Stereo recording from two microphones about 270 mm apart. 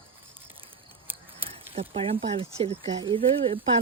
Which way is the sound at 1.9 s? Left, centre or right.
Centre.